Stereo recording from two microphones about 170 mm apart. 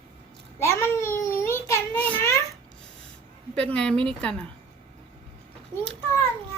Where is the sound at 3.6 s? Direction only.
5° left (ahead or behind).